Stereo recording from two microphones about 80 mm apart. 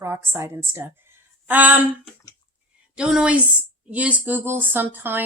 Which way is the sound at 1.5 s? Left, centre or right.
Right.